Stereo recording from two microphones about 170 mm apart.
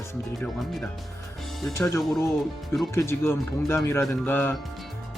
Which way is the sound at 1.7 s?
15° left (ahead or behind).